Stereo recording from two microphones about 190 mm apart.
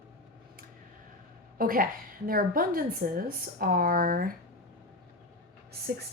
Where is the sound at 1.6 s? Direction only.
50° right (ahead or behind).